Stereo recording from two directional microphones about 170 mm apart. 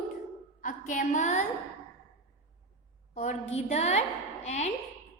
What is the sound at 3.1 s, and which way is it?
A woman's voice, 45° left (ahead or behind).